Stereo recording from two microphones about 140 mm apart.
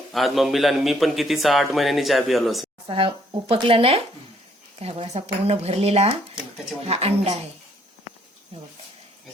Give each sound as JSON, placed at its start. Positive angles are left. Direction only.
{"t": 0.1, "sound": "a man's voice", "side_deg": 0}
{"t": 2.8, "sound": "speech", "side_deg": -40}